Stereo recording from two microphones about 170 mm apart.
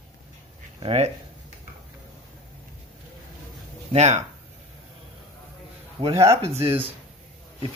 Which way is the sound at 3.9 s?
40° right (ahead or behind).